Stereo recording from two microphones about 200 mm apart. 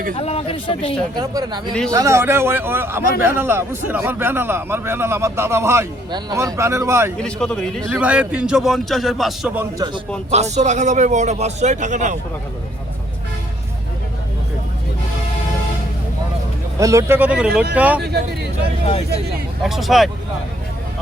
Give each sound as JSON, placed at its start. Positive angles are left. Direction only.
{"t": 0.2, "sound": "speech", "side_deg": 30}
{"t": 1.1, "sound": "a man's voice", "side_deg": -20}
{"t": 7.2, "sound": "a man's voice", "side_deg": 5}
{"t": 9.7, "sound": "speech", "side_deg": -20}
{"t": 10.3, "sound": "a man's voice", "side_deg": -35}
{"t": 16.8, "sound": "a man's voice", "side_deg": -15}
{"t": 19.6, "sound": "a man's voice", "side_deg": 0}